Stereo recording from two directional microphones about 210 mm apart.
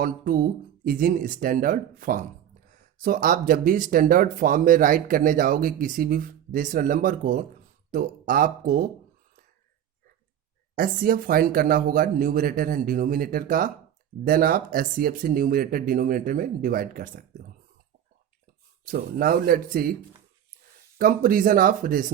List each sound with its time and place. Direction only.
0.0 s speech: 45° right (ahead or behind)
10.8 s speech: 45° right (ahead or behind)
18.9 s speech: 45° right (ahead or behind)
21.0 s speech: 40° right (ahead or behind)